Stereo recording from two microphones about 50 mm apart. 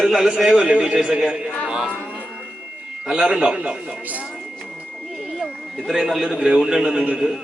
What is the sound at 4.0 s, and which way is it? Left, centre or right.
Speech, right.